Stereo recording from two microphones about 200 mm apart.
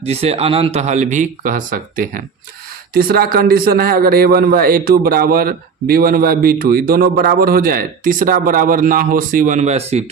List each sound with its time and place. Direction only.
0.0 s a man's voice: 30° right (ahead or behind)